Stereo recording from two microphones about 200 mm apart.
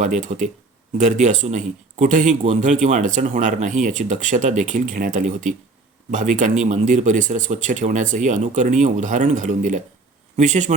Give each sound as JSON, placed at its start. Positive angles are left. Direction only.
{"t": 0.0, "sound": "speech", "side_deg": -40}